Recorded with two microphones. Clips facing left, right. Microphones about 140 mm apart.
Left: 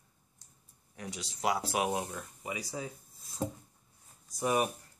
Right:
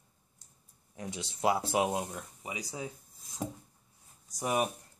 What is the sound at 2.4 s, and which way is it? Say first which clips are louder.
Speech: left 2 dB; 15° right (ahead or behind).